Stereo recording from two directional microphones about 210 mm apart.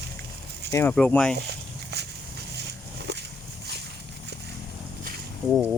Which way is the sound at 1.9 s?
50° right (ahead or behind).